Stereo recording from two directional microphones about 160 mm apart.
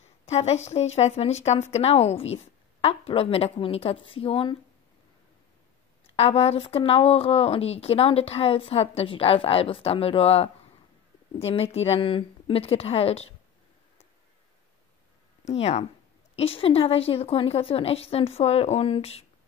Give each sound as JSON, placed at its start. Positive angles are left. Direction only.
{"t": 0.3, "sound": "a woman's voice", "side_deg": 40}
{"t": 6.1, "sound": "a woman's voice", "side_deg": 40}
{"t": 15.4, "sound": "a woman's voice", "side_deg": 40}